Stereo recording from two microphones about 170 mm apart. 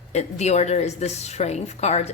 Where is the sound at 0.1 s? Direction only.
40° left (ahead or behind).